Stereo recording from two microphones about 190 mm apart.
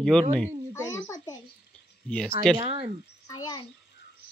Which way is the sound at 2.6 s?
30° right (ahead or behind).